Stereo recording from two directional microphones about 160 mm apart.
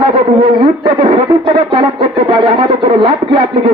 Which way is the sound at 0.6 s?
30° right (ahead or behind).